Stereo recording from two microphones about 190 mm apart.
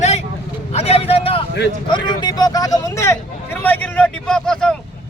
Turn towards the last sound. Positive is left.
turn(degrees=5)  # may be behind; listen again after turning